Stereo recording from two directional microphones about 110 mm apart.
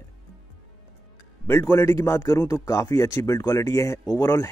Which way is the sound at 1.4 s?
20° left (ahead or behind).